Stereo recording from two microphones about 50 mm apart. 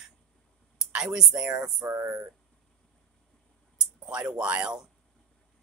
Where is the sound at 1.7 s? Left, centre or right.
Right.